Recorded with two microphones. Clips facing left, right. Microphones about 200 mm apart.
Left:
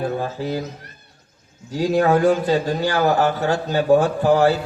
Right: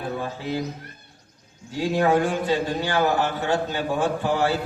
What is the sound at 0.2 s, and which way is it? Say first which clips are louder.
Speech: left 4 dB; 40° left (ahead or behind).